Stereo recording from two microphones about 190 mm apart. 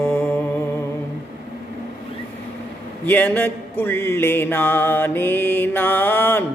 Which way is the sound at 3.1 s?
10° left (ahead or behind).